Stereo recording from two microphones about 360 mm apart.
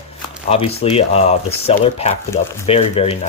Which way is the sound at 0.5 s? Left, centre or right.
Centre.